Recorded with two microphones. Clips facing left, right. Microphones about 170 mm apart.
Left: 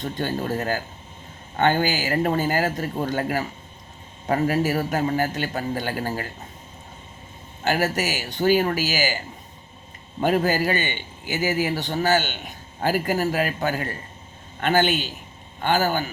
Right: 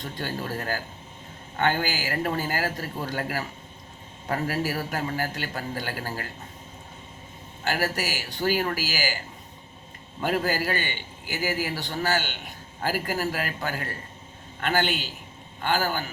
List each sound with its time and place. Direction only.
0.0 s a man's voice: 20° left (ahead or behind)
7.6 s a man's voice: 20° left (ahead or behind)
10.2 s a man's voice: 20° left (ahead or behind)